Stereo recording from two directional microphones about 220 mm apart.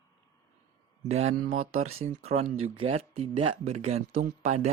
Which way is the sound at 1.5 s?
75° right (ahead or behind).